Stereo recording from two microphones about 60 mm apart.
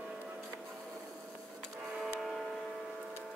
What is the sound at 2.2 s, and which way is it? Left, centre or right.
Tick-tock, centre.